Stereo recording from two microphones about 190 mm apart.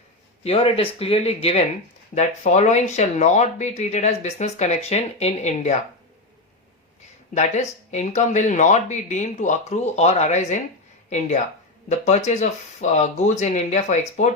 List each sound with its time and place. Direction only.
0.4 s speech: 30° left (ahead or behind)
7.3 s speech: 35° left (ahead or behind)
11.9 s speech: 35° left (ahead or behind)